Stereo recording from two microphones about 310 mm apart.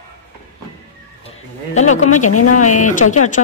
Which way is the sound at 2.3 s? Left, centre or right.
Left.